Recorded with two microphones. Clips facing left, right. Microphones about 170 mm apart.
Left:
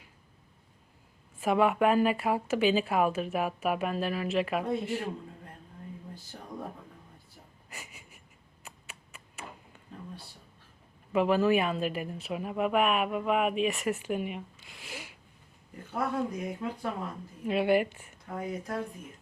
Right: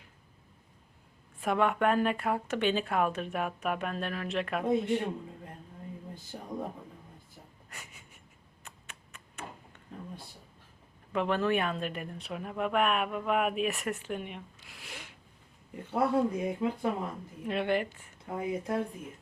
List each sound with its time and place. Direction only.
1.4 s speech: 5° left (ahead or behind)
6.3 s a sound: 15° right (ahead or behind)
7.7 s a sound: 10° left (ahead or behind)
11.1 s speech: 5° left (ahead or behind)
15.7 s speech: 25° right (ahead or behind)
17.4 s speech: 5° left (ahead or behind)
18.3 s speech: 20° right (ahead or behind)